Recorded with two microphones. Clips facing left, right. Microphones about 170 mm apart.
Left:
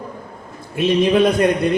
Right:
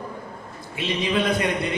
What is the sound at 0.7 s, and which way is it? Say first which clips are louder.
Speech: left 9 dB; 50° left (ahead or behind).